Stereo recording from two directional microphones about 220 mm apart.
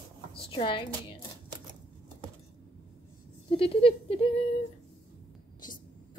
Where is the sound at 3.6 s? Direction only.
25° left (ahead or behind).